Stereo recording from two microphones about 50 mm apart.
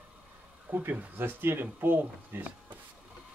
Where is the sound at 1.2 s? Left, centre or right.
Right.